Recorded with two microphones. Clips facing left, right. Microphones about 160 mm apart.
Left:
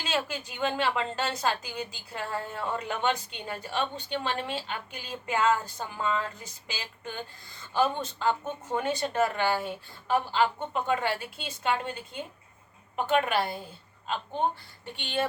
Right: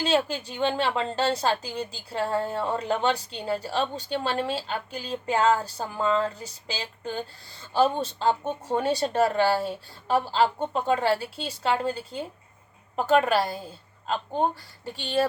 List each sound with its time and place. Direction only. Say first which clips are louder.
0.0 s a woman's voice: right 7 dB; 35° right (ahead or behind)
14.9 s a woman's voice: right 5 dB; 35° right (ahead or behind)